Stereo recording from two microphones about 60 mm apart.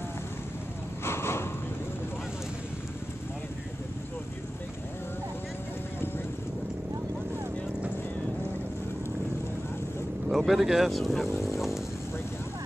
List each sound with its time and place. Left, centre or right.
1.0 s a sound: left
10.2 s speech: centre
11.4 s vehicle: centre